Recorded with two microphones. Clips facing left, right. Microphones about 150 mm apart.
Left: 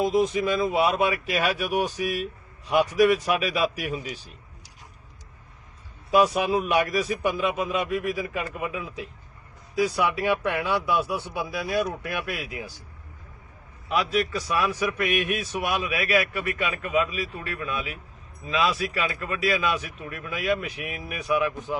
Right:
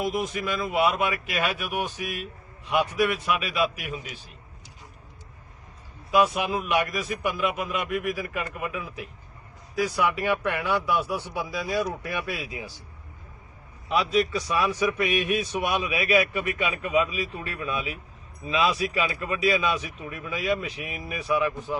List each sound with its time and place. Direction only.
0.0 s speech: 30° left (ahead or behind)
6.1 s speech: 35° left (ahead or behind)
8.1 s speech: 10° left (ahead or behind)
12.0 s a man's voice: 5° left (ahead or behind)
13.8 s a man's voice: centre (ahead or behind)